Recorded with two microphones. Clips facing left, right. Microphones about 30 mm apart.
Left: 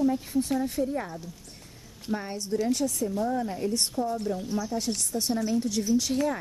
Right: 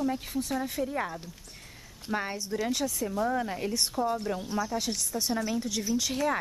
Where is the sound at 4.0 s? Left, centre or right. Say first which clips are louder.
Left 1 dB; centre.